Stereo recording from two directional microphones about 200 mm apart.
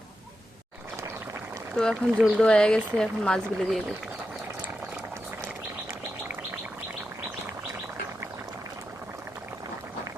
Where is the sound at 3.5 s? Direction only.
Centre (ahead or behind).